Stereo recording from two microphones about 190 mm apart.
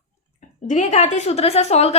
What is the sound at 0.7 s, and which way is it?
A woman's voice, 40° left (ahead or behind).